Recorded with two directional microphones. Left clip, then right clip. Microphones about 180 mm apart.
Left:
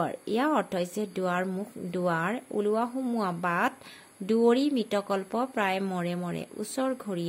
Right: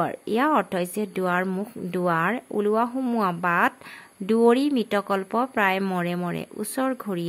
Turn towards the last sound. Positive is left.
turn(degrees=-15)  # may be behind; listen again after turning